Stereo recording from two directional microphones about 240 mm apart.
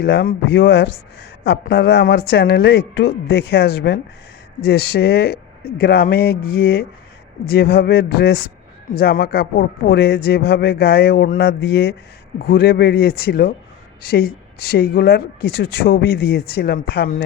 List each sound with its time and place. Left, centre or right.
0.0 s a man's voice: left
14.7 s a man's voice: left